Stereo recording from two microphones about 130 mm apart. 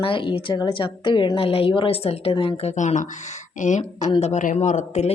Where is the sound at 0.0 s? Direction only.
40° left (ahead or behind).